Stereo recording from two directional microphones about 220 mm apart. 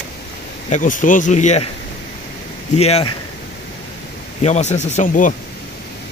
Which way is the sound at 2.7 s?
30° left (ahead or behind).